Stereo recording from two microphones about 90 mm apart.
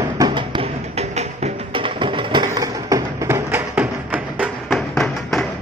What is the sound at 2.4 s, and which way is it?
Tap, 40° right (ahead or behind).